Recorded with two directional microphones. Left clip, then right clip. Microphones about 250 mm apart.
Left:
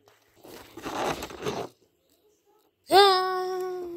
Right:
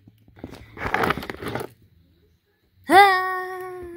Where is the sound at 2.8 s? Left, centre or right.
Centre.